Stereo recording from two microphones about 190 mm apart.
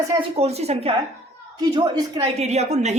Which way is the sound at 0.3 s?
35° right (ahead or behind).